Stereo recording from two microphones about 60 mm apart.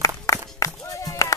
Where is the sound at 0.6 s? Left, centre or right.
Left.